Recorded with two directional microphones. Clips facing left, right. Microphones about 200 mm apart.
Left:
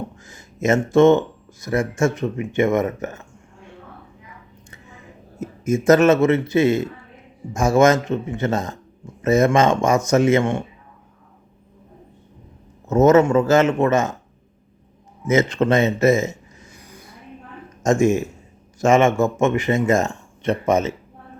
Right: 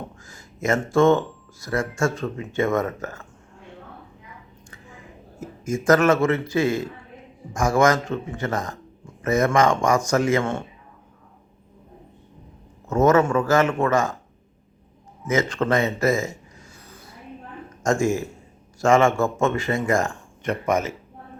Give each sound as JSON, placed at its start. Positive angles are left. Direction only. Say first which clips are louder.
{"t": 0.2, "sound": "a sound", "louder": "left 4 dB", "side_deg": 20}
{"t": 1.6, "sound": "a man's voice", "louder": "left 4 dB", "side_deg": 20}
{"t": 5.4, "sound": "a man's voice", "louder": "left 6 dB", "side_deg": 20}
{"t": 12.9, "sound": "a man's voice", "louder": "left 4 dB", "side_deg": 20}
{"t": 15.2, "sound": "a man's voice", "louder": "left 5 dB", "side_deg": 20}
{"t": 17.8, "sound": "a man's voice", "louder": "left 4 dB", "side_deg": 20}